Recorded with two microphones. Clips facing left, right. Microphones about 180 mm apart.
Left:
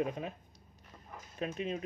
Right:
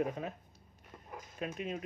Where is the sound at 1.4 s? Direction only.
25° left (ahead or behind).